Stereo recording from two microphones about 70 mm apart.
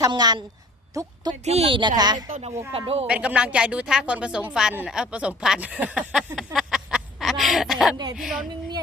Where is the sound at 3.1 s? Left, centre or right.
Centre.